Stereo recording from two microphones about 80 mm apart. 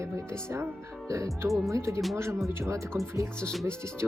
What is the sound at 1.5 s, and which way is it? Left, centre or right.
Speech, centre.